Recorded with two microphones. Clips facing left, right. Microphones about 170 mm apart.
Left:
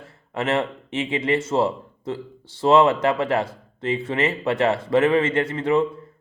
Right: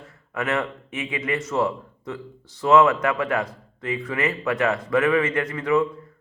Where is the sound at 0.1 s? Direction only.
30° left (ahead or behind).